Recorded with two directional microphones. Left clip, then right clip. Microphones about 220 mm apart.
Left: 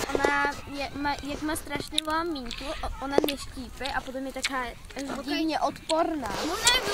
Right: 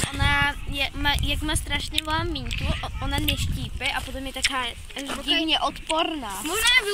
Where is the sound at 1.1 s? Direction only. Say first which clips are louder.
Right 5 dB; 5° left (ahead or behind).